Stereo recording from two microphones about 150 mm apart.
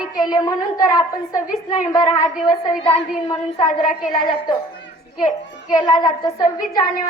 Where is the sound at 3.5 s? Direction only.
55° left (ahead or behind).